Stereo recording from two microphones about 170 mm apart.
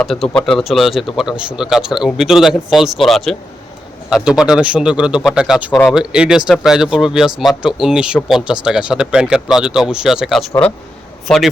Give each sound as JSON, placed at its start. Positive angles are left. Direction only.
{"t": 0.0, "sound": "speech", "side_deg": 5}